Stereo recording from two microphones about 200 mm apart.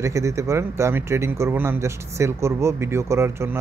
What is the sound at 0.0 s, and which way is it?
A man's voice, 15° right (ahead or behind).